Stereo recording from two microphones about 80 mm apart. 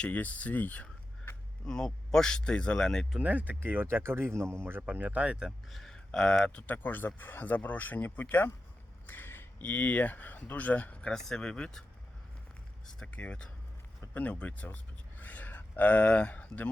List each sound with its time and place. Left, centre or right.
0.0 s speech: centre
1.6 s speech: centre
3.2 s speech: centre
5.5 s speech: centre
6.1 s speech: centre
13.1 s speech: centre
15.2 s a sound: left